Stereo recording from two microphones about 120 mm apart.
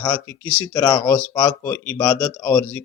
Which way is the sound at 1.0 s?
15° left (ahead or behind).